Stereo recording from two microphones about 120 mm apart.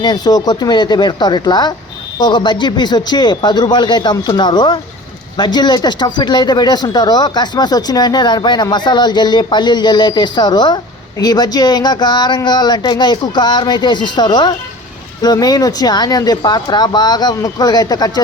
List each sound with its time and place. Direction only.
0.0 s speech: 35° left (ahead or behind)